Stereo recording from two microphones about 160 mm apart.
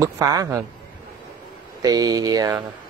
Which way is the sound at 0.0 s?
20° right (ahead or behind).